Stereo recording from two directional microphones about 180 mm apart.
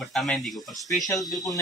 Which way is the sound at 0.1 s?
Centre (ahead or behind).